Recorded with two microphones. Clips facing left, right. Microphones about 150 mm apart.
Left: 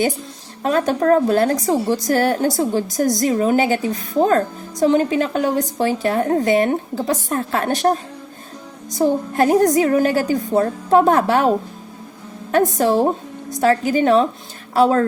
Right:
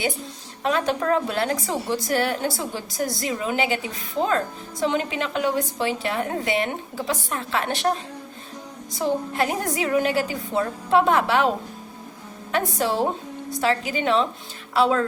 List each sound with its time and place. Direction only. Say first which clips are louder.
0.6 s a woman's voice: left 5 dB; 45° left (ahead or behind)